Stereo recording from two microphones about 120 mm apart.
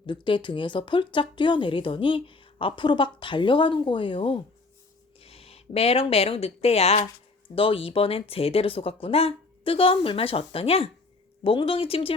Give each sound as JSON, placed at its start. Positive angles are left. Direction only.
{"t": 0.0, "sound": "speech", "side_deg": 45}